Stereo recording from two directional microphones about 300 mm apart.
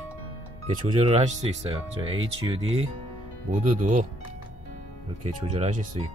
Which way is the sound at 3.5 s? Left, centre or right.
Right.